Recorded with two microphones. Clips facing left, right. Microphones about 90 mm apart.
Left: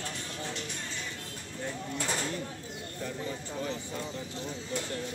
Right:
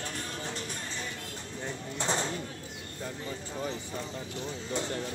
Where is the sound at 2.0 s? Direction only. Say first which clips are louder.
Right 4 dB; 25° right (ahead or behind).